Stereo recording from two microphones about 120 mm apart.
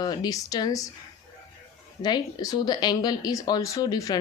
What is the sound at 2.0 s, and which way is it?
A woman's voice, 35° left (ahead or behind).